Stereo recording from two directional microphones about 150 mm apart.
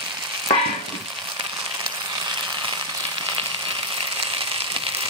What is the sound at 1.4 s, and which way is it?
Frying, 30° right (ahead or behind).